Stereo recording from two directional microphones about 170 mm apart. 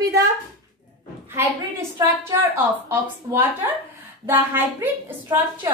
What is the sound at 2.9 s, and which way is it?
A woman's voice, 15° right (ahead or behind).